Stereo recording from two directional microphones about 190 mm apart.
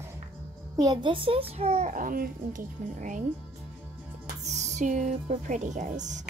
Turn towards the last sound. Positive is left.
turn(degrees=-40)  # may be behind; listen again after turning